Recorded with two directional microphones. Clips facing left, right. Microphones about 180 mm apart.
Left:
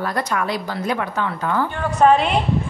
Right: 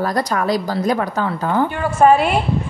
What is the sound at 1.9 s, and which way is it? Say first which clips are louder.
Speech: right 2 dB; 5° right (ahead or behind).